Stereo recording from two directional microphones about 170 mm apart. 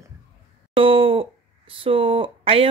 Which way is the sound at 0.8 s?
30° right (ahead or behind).